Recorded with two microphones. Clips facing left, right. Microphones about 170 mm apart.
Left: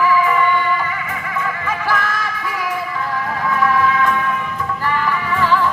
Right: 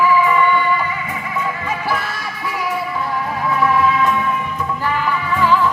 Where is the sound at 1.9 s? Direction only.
45° left (ahead or behind).